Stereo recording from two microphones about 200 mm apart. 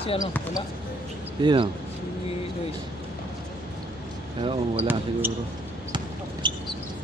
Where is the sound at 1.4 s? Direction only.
25° right (ahead or behind).